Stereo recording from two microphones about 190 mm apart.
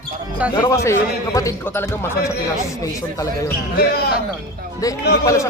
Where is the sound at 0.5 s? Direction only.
15° left (ahead or behind).